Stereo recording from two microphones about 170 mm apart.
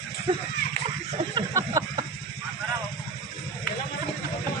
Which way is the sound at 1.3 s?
20° right (ahead or behind).